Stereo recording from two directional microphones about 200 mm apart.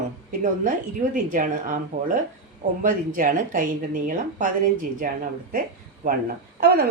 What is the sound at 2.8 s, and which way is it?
A woman's voice, 40° right (ahead or behind).